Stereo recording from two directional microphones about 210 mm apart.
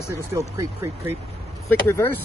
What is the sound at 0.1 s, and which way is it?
Speech, 15° right (ahead or behind).